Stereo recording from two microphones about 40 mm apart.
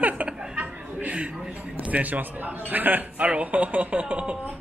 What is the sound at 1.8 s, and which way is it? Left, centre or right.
A man's voice, right.